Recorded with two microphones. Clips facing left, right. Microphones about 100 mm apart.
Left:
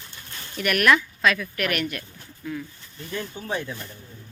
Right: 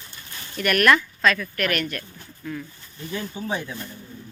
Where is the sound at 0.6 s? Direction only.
5° left (ahead or behind).